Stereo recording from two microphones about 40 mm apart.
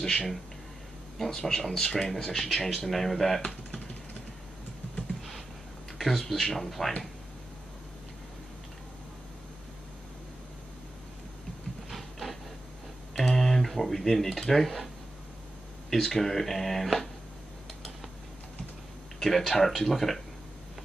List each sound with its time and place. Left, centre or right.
0.0 s speech: centre
1.3 s speech: centre
5.9 s speech: centre
11.9 s printer: centre
13.1 s speech: centre
15.9 s speech: centre
19.1 s speech: centre